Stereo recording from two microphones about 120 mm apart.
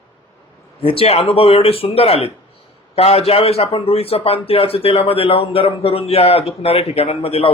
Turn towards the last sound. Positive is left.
turn(degrees=55)  # may be behind; listen again after turning